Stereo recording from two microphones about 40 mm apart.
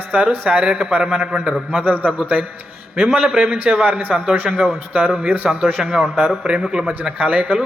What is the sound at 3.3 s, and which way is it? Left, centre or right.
Speech, right.